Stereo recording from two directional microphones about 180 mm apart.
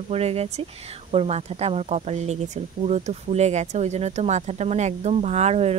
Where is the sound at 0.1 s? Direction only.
35° right (ahead or behind).